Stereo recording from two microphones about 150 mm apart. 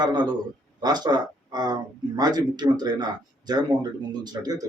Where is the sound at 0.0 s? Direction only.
30° right (ahead or behind).